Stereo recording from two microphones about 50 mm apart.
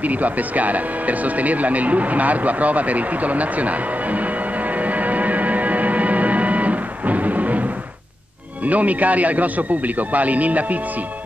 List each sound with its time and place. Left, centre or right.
0.0 s music: right
8.6 s speech: right